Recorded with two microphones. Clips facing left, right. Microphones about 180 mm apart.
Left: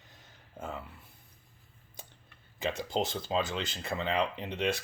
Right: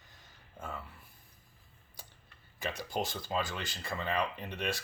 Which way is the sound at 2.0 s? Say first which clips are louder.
Left 4 dB; 20° left (ahead or behind).